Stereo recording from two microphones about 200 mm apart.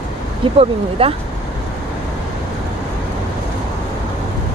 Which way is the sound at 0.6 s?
30° right (ahead or behind).